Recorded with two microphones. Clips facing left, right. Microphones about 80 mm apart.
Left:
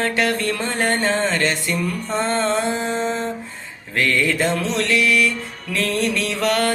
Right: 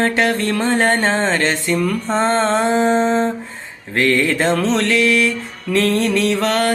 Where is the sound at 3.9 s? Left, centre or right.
Right.